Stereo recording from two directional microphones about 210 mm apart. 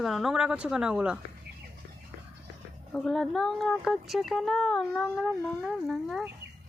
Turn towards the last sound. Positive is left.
turn(degrees=0)  # may be behind; listen again after turning